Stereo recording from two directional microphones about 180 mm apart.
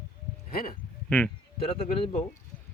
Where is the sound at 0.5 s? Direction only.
50° left (ahead or behind).